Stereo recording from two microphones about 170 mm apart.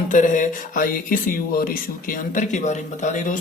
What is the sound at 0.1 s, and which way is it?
A man's voice, 50° left (ahead or behind).